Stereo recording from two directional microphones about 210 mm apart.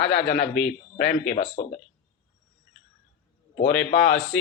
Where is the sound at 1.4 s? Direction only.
35° left (ahead or behind).